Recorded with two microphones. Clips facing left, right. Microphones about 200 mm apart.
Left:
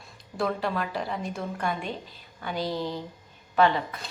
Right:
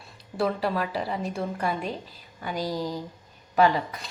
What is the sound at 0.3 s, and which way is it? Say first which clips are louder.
A woman's voice: right 2 dB; 5° right (ahead or behind).